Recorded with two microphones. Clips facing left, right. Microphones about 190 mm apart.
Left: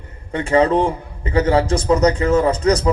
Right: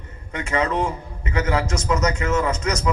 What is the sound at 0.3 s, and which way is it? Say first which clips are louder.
A man's voice: left 7 dB; 30° left (ahead or behind).